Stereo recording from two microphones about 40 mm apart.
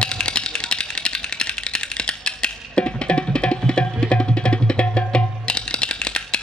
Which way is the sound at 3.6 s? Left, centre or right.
Left.